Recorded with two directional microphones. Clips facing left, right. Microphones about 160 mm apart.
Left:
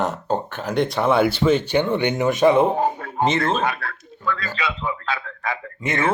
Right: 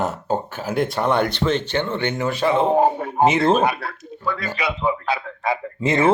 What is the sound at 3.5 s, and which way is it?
Speech, 15° right (ahead or behind).